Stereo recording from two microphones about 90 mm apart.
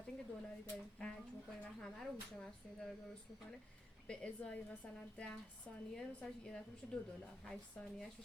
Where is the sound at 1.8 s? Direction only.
5° left (ahead or behind).